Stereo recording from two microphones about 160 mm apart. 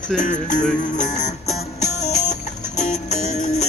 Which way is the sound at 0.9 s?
50° left (ahead or behind).